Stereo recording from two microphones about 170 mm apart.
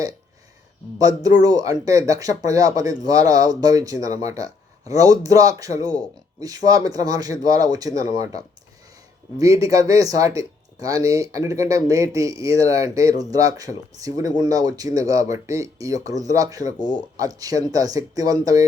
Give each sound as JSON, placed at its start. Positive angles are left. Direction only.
{"t": 0.9, "sound": "speech", "side_deg": -20}
{"t": 9.4, "sound": "speech", "side_deg": -20}